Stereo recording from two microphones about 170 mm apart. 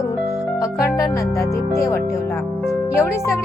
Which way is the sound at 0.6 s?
20° left (ahead or behind).